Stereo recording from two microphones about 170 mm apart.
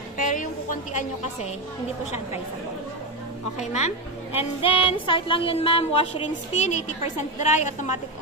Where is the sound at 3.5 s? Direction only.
45° left (ahead or behind).